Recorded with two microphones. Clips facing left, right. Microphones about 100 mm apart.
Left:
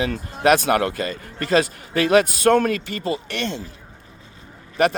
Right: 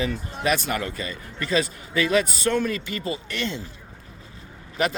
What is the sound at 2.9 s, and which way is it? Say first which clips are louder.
Speech: left 4 dB; 55° left (ahead or behind).